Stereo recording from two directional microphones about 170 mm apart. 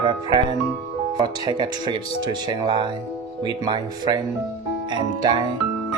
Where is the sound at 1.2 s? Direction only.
30° right (ahead or behind).